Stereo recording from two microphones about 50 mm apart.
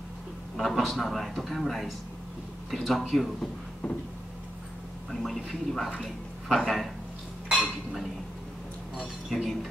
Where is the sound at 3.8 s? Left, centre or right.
Left.